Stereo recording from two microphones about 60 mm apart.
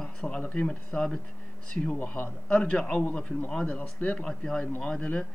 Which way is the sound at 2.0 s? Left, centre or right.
Left.